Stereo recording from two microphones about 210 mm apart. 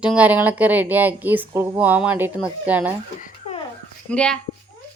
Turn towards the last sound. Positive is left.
turn(degrees=5)  # may be behind; listen again after turning